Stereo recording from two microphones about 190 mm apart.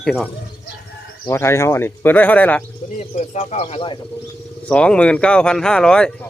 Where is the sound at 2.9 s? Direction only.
35° left (ahead or behind).